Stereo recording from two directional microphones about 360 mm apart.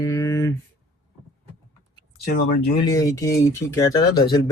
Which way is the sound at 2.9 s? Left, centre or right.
Centre.